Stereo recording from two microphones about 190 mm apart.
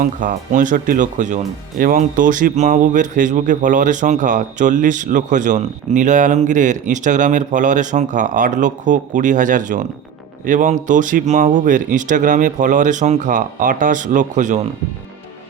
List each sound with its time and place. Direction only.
0.0 s speech: 40° right (ahead or behind)